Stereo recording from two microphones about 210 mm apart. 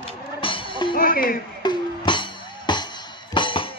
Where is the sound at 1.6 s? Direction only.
20° left (ahead or behind).